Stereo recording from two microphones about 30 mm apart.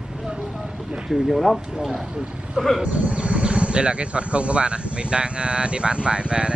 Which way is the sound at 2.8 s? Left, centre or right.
Right.